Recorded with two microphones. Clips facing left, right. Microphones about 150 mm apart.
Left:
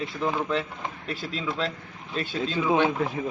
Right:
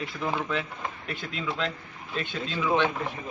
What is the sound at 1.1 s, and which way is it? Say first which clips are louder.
A man's voice: left 3 dB; 35° left (ahead or behind).